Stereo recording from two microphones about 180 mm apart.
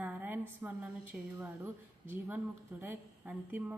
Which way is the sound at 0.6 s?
20° right (ahead or behind).